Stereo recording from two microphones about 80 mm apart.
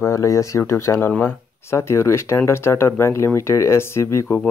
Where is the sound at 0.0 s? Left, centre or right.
Left.